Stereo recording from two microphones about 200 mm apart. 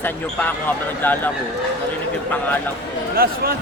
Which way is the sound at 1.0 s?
10° left (ahead or behind).